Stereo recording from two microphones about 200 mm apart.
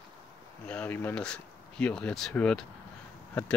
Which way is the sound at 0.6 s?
5° left (ahead or behind).